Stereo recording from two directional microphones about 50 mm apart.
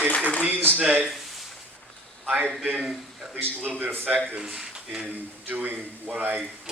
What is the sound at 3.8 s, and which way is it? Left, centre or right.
Speech, right.